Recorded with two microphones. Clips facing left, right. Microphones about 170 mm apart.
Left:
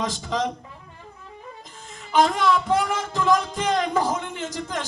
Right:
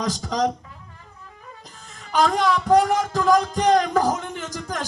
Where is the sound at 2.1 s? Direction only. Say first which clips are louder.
Even; 40° right (ahead or behind).